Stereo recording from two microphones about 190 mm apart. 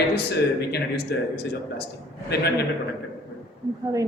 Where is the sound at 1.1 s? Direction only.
60° left (ahead or behind).